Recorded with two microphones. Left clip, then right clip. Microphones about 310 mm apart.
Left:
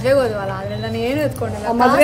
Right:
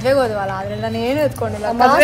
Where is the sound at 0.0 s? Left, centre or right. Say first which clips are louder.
Even; centre.